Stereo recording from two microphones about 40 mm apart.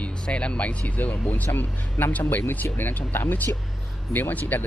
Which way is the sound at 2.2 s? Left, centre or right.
Left.